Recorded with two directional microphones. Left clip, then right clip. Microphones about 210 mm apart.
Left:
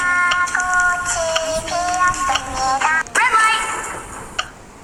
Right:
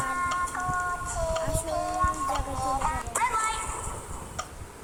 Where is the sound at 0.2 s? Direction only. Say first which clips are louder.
Left 12 dB; 40° left (ahead or behind).